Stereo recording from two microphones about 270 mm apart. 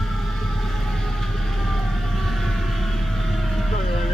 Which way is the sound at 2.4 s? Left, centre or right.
Centre.